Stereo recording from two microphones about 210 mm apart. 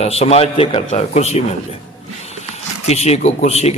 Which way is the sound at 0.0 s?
30° left (ahead or behind).